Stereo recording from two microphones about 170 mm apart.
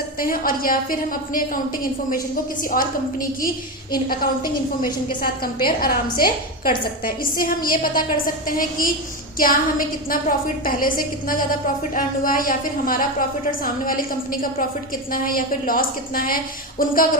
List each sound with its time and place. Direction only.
0.2 s a woman's voice: 55° left (ahead or behind)
4.4 s a woman's voice: 25° left (ahead or behind)
5.6 s a woman's voice: 60° left (ahead or behind)